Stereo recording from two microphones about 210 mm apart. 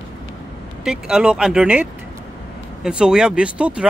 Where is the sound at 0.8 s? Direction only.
5° right (ahead or behind).